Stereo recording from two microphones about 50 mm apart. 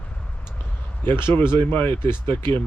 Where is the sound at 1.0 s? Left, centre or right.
Left.